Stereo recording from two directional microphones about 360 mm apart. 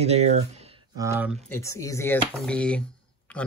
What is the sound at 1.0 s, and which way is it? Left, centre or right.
Speech, centre.